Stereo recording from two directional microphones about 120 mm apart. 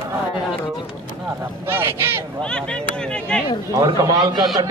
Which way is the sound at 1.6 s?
20° right (ahead or behind).